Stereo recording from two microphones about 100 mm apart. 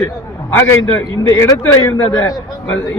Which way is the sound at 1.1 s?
40° left (ahead or behind).